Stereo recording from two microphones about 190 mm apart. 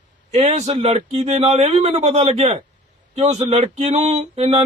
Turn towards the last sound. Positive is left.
turn(degrees=-35)  # may be behind; listen again after turning